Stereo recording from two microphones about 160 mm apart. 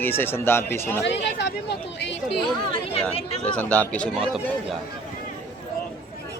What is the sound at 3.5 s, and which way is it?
Speech, 5° left (ahead or behind).